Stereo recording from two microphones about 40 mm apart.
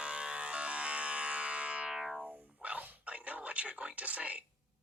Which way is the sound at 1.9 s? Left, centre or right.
Centre.